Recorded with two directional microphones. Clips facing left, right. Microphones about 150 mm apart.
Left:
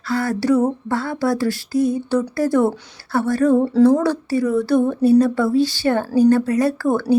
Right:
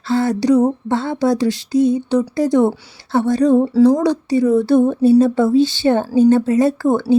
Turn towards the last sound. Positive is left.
turn(degrees=-20)  # may be behind; listen again after turning